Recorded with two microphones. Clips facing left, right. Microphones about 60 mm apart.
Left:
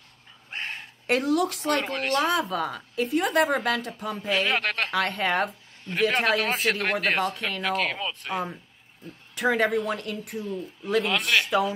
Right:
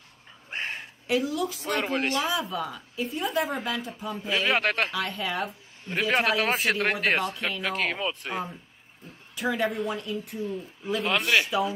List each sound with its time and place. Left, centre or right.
0.5 s a sound: centre
1.0 s a woman's voice: left
1.8 s a man's voice: centre
2.1 s a woman's voice: left
4.5 s a man's voice: centre
4.9 s a woman's voice: left
5.9 s a man's voice: centre
9.3 s a woman's voice: left
11.1 s a man's voice: centre